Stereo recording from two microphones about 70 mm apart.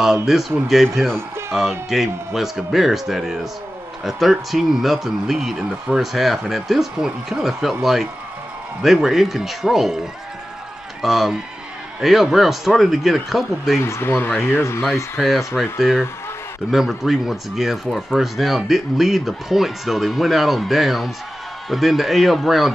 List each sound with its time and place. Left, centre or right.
0.0 s speech: centre
13.7 s speech: left
15.1 s speech: centre